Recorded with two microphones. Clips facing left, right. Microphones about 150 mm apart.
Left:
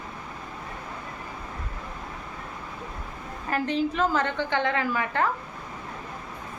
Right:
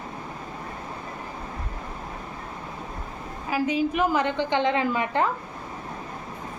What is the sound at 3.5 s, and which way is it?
A woman's voice, 10° right (ahead or behind).